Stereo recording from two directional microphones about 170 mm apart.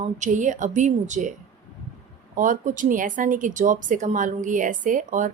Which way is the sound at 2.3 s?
50° right (ahead or behind).